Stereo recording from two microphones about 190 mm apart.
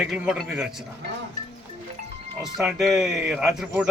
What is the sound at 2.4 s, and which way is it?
A man's voice, centre (ahead or behind).